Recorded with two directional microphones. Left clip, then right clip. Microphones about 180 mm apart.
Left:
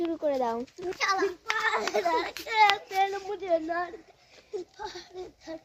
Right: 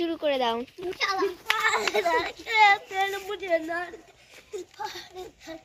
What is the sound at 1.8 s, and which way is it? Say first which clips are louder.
A child's voice: right 3 dB; 15° left (ahead or behind).